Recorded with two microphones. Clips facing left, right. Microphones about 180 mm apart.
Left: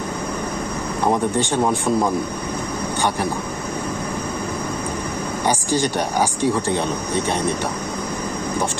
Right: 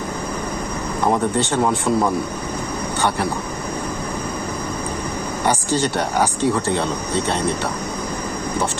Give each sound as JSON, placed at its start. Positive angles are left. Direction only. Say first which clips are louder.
{"t": 1.4, "sound": "speech", "louder": "even", "side_deg": 15}
{"t": 5.5, "sound": "speech", "louder": "right 1 dB", "side_deg": 15}